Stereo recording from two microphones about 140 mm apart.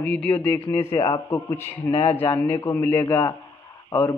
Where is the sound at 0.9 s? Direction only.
35° left (ahead or behind).